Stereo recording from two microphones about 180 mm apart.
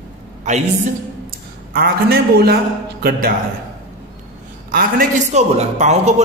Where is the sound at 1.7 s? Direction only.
60° right (ahead or behind).